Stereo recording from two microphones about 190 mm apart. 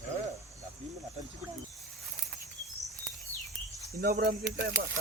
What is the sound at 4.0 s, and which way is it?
Speech, 55° right (ahead or behind).